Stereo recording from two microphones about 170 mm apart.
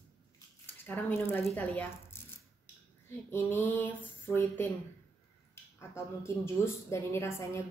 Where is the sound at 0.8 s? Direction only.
10° left (ahead or behind).